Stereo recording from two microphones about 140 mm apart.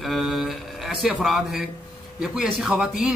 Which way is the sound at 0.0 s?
Centre (ahead or behind).